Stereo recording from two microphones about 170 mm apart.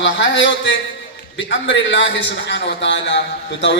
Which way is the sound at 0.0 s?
90° left.